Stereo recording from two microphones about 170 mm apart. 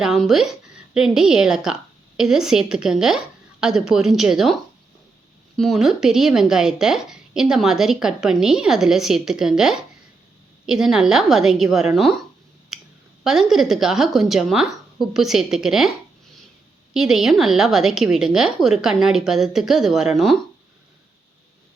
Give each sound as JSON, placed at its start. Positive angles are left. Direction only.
{"t": 0.0, "sound": "speech", "side_deg": 0}
{"t": 5.5, "sound": "speech", "side_deg": 0}
{"t": 13.2, "sound": "speech", "side_deg": -5}
{"t": 16.9, "sound": "speech", "side_deg": -5}